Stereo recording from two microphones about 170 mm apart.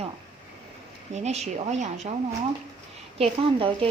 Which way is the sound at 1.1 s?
40° right (ahead or behind).